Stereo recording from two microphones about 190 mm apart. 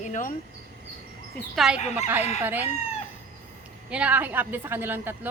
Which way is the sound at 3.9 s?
5° right (ahead or behind).